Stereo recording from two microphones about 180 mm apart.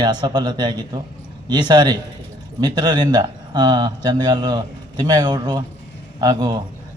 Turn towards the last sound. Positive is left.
turn(degrees=-20)  # may be behind; listen again after turning